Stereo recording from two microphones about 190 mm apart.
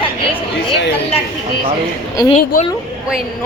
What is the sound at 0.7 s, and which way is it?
Speech, 65° left (ahead or behind).